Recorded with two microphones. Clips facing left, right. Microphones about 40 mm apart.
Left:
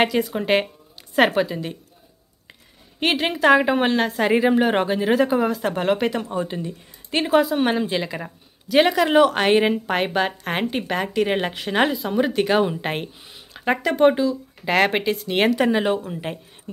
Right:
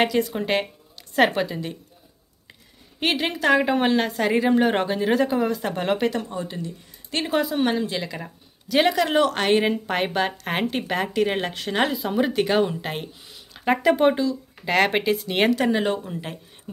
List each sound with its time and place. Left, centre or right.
0.0 s speech: centre
3.0 s a woman's voice: centre
6.4 s speech: left
7.2 s speech: centre
7.6 s a woman's voice: centre
11.9 s speech: centre
12.8 s a sound: left
13.8 s speech: centre
14.1 s speech: centre
16.2 s speech: centre